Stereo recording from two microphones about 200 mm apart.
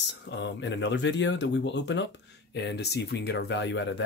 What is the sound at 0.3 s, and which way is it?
Speech, 65° left (ahead or behind).